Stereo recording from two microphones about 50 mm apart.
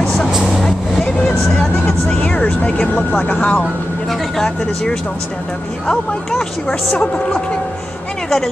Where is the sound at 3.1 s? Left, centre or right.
Left.